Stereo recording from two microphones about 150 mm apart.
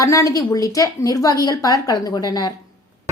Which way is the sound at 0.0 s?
20° left (ahead or behind).